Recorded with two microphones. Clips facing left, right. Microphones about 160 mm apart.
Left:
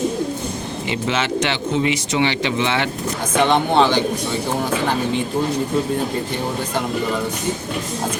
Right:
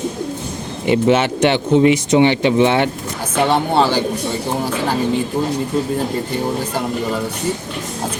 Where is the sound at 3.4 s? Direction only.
10° right (ahead or behind).